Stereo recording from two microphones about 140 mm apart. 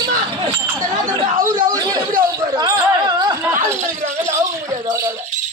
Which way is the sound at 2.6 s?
30° right (ahead or behind).